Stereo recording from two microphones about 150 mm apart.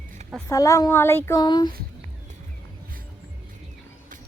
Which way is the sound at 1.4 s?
30° left (ahead or behind).